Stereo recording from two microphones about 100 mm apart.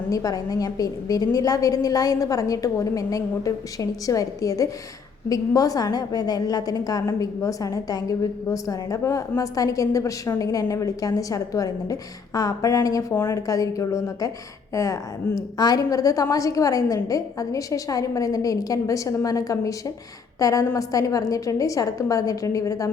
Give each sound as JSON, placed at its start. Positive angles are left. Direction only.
{"t": 0.1, "sound": "a woman's voice", "side_deg": 35}